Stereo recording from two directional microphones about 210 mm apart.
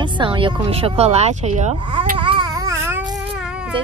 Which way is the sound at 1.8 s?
25° right (ahead or behind).